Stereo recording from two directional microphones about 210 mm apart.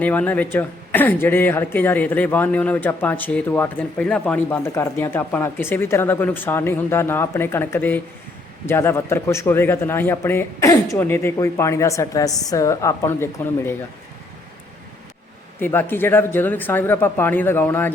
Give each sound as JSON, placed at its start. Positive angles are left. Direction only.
{"t": 0.0, "sound": "speech", "side_deg": 5}
{"t": 15.6, "sound": "speech", "side_deg": 10}